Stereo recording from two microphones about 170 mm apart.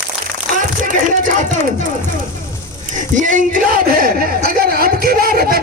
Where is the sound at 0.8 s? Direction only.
50° right (ahead or behind).